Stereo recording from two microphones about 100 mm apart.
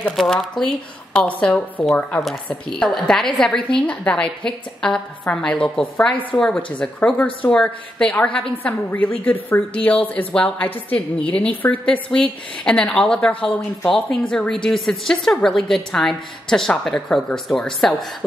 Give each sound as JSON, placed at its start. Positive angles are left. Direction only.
{"t": 0.1, "sound": "a woman's voice", "side_deg": 0}